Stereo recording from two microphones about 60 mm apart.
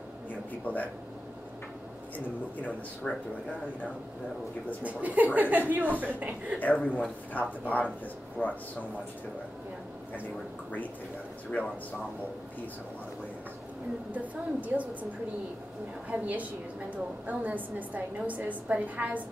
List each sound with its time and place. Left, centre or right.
0.7 s speech: left
2.1 s speech: left
4.8 s a woman's voice: right
6.6 s speech: left
14.1 s a woman's voice: right
16.1 s a woman's voice: right